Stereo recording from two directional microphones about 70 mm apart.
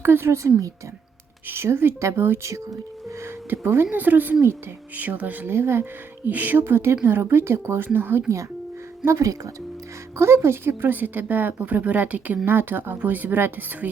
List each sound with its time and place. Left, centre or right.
0.0 s a woman's voice: right
3.5 s speech: right
9.0 s speech: right